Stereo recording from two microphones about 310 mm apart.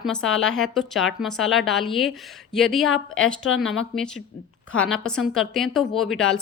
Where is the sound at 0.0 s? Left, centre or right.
Centre.